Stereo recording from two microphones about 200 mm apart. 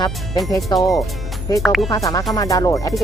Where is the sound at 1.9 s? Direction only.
15° left (ahead or behind).